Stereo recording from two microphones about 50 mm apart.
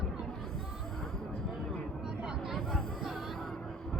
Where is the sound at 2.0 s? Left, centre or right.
Centre.